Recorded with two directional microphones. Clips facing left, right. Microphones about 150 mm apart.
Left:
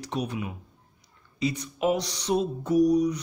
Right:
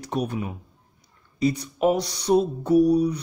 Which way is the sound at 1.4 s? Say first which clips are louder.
Right 5 dB; 45° right (ahead or behind).